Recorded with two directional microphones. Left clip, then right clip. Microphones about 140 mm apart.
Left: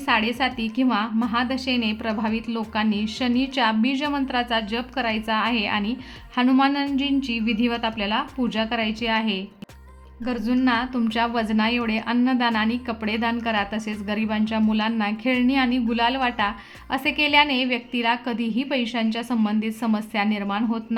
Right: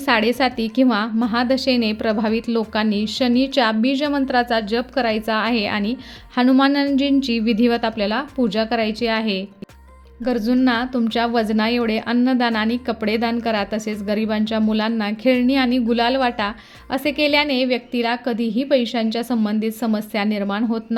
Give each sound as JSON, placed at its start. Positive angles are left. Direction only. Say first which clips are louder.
{"t": 0.0, "sound": "a woman's voice", "louder": "right 4 dB", "side_deg": -45}